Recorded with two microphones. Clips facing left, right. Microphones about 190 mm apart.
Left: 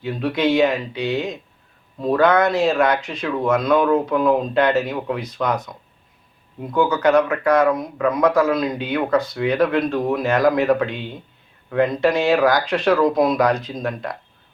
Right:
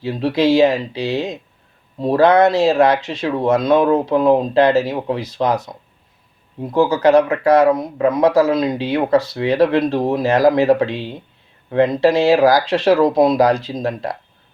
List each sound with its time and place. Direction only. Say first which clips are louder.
0.0 s speech: right 4 dB; 30° right (ahead or behind)